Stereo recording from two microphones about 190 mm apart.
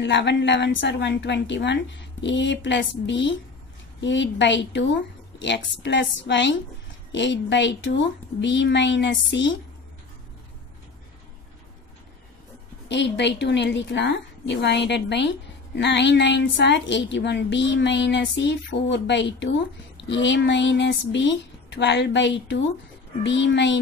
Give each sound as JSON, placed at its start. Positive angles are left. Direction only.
{"t": 0.0, "sound": "a woman's voice", "side_deg": 65}
{"t": 12.8, "sound": "a woman's voice", "side_deg": 70}